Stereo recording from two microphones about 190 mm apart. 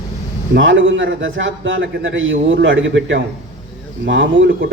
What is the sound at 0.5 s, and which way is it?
A man's voice, 90° right.